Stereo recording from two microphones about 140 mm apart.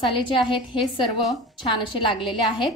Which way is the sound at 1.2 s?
Centre (ahead or behind).